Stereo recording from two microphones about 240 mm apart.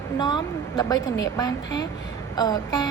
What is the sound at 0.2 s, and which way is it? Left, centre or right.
A woman's voice, centre.